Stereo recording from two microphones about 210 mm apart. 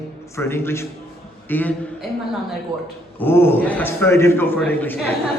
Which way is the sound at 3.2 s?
10° left (ahead or behind).